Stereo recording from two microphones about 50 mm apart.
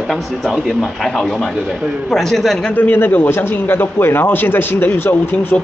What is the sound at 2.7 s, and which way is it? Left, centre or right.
A man's voice, left.